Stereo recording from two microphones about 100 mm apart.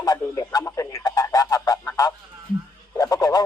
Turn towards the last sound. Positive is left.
turn(degrees=40)  # may be behind; listen again after turning